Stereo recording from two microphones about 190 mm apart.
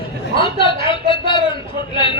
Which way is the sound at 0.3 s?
25° left (ahead or behind).